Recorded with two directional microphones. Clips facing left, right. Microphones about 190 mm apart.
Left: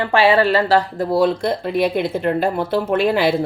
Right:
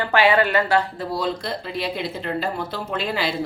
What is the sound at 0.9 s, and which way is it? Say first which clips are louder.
A woman's voice: left 9 dB; 55° left (ahead or behind).